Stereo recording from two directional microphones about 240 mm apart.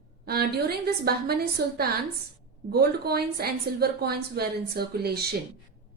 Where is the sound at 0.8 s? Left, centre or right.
Right.